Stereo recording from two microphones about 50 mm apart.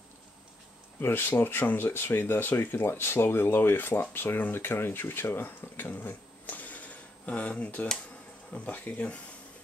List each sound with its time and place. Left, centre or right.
0.9 s speech: left